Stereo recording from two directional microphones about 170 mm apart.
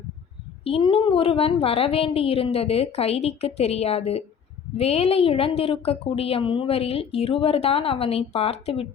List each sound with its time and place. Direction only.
0.6 s a woman's voice: 30° left (ahead or behind)